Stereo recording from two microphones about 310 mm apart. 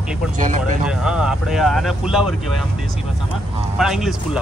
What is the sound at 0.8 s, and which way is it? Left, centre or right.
Speech, centre.